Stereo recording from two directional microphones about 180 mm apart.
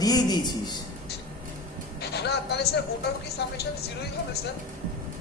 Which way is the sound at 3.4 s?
70° left (ahead or behind).